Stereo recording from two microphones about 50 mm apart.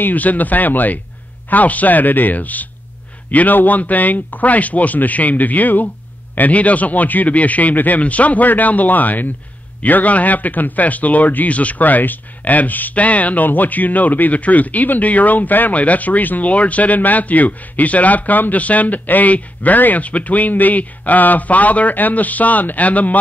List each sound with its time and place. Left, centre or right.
0.0 s speech: left